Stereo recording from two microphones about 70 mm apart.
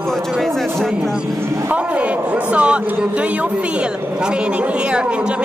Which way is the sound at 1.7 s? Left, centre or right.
Centre.